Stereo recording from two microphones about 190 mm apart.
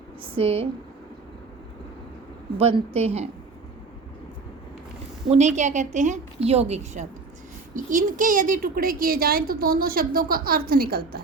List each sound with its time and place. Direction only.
0.3 s speech: 30° right (ahead or behind)
2.6 s a woman's voice: 30° right (ahead or behind)
5.3 s a woman's voice: 35° right (ahead or behind); by 11.2 s 55° right (ahead or behind)